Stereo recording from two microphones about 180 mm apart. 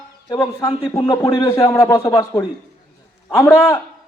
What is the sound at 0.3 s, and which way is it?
A man's voice, 20° left (ahead or behind).